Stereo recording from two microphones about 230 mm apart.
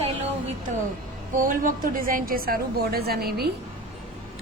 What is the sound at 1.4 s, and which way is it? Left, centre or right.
A woman's voice, right.